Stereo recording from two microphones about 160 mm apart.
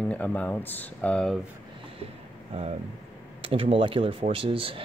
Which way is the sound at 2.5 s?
40° right (ahead or behind).